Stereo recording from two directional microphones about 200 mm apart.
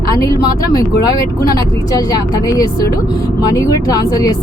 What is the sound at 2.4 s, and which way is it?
Speech, 15° left (ahead or behind).